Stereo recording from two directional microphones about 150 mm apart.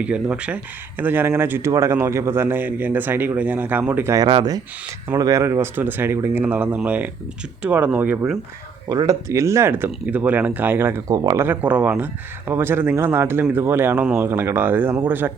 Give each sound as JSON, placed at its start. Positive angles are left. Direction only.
{"t": 0.0, "sound": "speech", "side_deg": -10}
{"t": 8.9, "sound": "speech", "side_deg": -25}